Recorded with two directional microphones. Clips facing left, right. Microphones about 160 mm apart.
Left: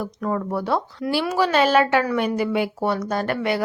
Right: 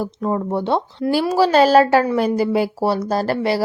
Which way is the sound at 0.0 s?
25° right (ahead or behind).